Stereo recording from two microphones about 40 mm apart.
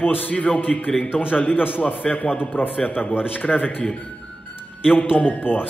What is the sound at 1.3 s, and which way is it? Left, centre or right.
Speech, left.